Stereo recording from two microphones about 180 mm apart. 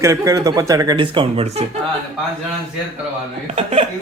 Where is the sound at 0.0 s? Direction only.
20° right (ahead or behind); by 1.6 s 35° right (ahead or behind).